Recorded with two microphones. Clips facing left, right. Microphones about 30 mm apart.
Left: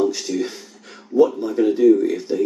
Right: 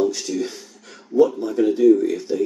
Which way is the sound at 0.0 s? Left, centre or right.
Centre.